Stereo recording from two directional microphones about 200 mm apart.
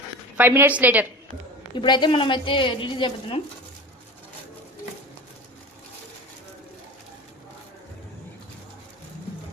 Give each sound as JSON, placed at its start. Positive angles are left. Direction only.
{"t": 0.3, "sound": "a woman's voice", "side_deg": -10}
{"t": 1.7, "sound": "a woman's voice", "side_deg": 25}